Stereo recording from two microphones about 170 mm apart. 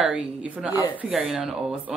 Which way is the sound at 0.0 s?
5° right (ahead or behind).